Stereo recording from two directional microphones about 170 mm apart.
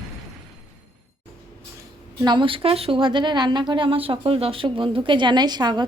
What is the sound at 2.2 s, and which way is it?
Speech, 30° right (ahead or behind).